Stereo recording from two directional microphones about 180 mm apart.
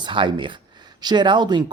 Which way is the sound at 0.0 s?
25° right (ahead or behind).